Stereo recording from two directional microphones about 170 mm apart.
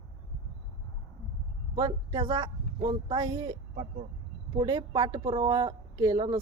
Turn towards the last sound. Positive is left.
turn(degrees=-25)  # may be behind; listen again after turning